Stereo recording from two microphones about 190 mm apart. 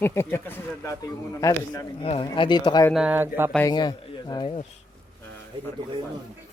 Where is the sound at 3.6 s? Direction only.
20° left (ahead or behind).